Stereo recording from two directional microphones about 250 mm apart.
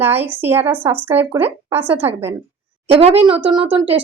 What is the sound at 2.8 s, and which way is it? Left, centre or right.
Speech, right.